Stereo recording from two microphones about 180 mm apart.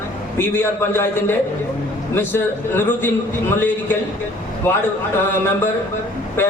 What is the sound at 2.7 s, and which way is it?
Speech, 10° left (ahead or behind).